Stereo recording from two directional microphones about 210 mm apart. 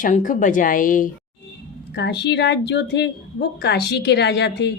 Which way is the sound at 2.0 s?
50° left (ahead or behind).